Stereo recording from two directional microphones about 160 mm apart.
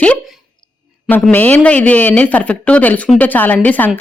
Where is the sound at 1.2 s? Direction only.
10° left (ahead or behind).